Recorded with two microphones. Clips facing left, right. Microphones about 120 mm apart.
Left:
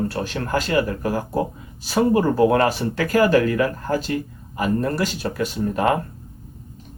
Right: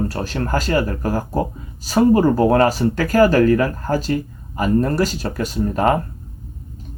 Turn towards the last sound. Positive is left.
turn(degrees=-40)  # may be behind; listen again after turning